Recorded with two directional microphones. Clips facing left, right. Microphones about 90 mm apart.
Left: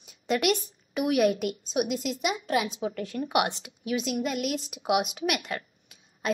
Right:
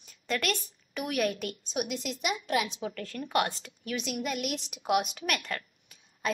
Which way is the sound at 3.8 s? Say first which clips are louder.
Left 5 dB; 5° left (ahead or behind).